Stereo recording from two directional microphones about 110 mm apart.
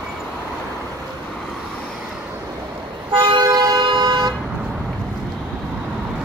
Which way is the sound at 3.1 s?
45° right (ahead or behind).